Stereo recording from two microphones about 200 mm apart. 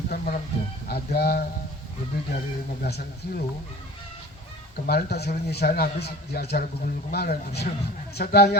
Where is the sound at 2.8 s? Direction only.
50° left (ahead or behind).